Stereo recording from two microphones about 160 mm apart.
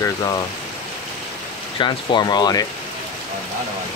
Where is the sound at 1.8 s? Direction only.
30° left (ahead or behind).